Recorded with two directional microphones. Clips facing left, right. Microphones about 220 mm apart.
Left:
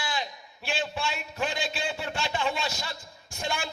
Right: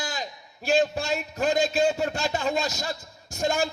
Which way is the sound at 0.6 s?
40° right (ahead or behind).